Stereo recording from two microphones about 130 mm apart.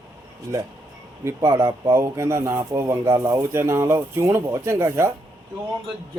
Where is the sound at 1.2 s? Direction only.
20° right (ahead or behind).